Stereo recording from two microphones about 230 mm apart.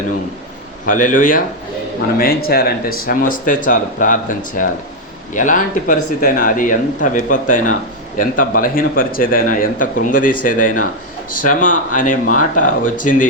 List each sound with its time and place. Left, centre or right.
0.9 s a man's voice: left